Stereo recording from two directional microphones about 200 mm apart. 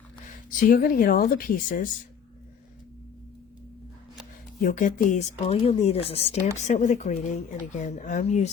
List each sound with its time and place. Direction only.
0.3 s speech: 45° left (ahead or behind)
4.6 s speech: 40° left (ahead or behind)